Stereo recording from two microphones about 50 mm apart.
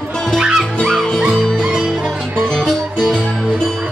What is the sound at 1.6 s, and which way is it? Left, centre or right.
Music, centre.